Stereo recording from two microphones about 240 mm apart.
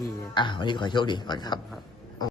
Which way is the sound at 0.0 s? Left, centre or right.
Centre.